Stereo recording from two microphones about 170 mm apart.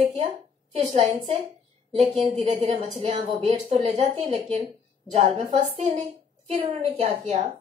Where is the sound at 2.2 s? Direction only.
40° right (ahead or behind).